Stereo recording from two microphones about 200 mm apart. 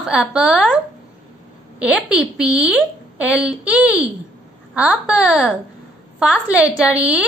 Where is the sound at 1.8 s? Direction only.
5° right (ahead or behind).